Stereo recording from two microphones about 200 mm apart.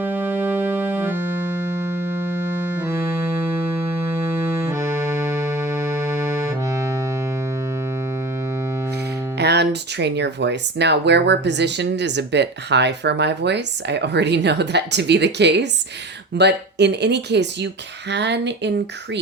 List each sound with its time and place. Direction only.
0.0 s music: 10° right (ahead or behind)
4.0 s organ: 10° right (ahead or behind)
9.4 s speech: 55° right (ahead or behind)